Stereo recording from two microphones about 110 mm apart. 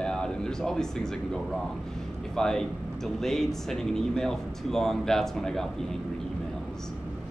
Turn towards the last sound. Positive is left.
turn(degrees=5)  # may be behind; listen again after turning